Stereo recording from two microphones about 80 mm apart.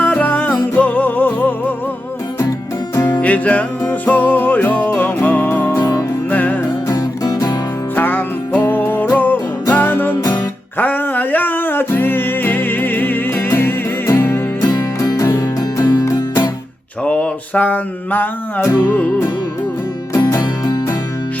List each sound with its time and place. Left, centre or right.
0.0 s music: left
3.1 s music: centre
6.9 s music: left
7.9 s music: left
15.0 s music: left
17.0 s a sound: centre
18.6 s music: left
20.1 s music: left
20.4 s music: left